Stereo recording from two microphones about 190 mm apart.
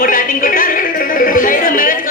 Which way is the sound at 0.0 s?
45° left (ahead or behind).